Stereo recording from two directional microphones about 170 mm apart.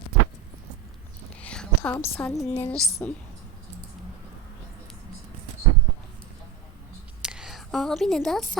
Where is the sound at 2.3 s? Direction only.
15° left (ahead or behind).